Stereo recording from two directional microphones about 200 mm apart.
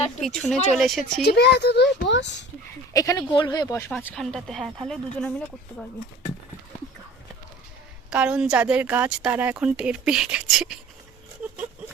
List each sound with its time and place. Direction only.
0.2 s speech: 5° left (ahead or behind)
1.2 s speech: 55° left (ahead or behind)
2.9 s speech: 15° left (ahead or behind)
3.9 s speech: 5° left (ahead or behind)
8.1 s speech: 5° right (ahead or behind)